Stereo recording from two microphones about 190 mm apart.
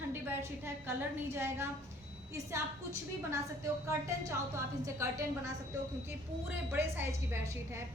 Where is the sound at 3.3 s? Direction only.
15° right (ahead or behind).